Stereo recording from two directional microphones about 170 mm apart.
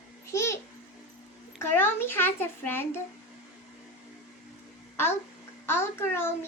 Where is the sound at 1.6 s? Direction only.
15° left (ahead or behind).